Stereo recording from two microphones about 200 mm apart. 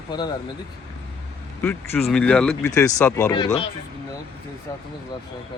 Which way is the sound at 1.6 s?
10° left (ahead or behind).